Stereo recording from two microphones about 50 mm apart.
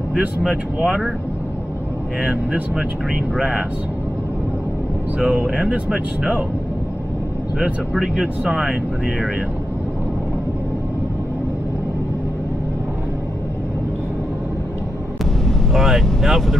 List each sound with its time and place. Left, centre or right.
0.4 s speech: centre
2.2 s speech: right
5.2 s speech: centre
7.9 s speech: centre
15.4 s speech: centre